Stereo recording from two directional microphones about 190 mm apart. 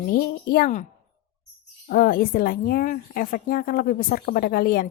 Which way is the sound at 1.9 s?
50° left (ahead or behind).